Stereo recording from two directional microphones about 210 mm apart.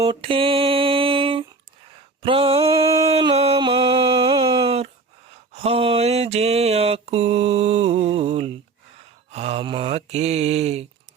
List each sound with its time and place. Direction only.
0.0 s mantra: 25° right (ahead or behind)
2.2 s a sound: 25° right (ahead or behind)
5.5 s mantra: 30° right (ahead or behind)